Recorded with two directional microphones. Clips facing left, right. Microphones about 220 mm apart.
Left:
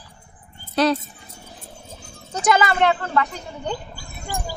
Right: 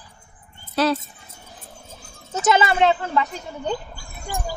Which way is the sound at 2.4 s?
25° right (ahead or behind).